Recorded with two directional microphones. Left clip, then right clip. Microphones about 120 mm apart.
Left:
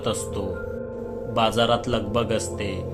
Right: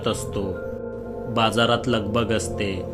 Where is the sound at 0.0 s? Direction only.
25° right (ahead or behind).